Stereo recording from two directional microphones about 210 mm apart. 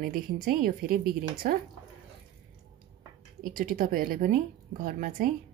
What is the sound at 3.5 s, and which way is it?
Speech, 40° right (ahead or behind).